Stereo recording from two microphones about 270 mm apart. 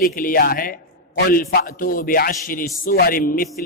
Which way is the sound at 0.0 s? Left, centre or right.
Left.